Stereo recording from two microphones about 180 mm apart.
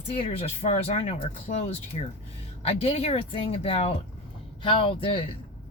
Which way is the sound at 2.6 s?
35° left (ahead or behind).